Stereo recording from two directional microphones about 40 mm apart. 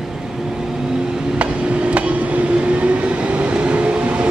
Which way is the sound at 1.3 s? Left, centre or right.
Right.